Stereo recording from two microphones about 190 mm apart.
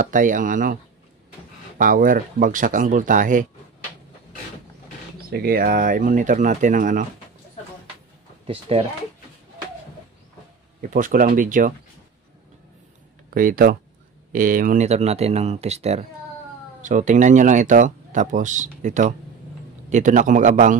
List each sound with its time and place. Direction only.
0.0 s speech: 45° right (ahead or behind)
1.8 s speech: 45° right (ahead or behind)
5.3 s speech: 50° right (ahead or behind)
8.5 s speech: 30° right (ahead or behind)
10.8 s speech: 45° right (ahead or behind)
13.3 s speech: 50° right (ahead or behind)